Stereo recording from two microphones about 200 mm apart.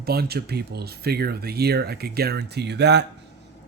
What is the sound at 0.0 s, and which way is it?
Speech, 50° right (ahead or behind).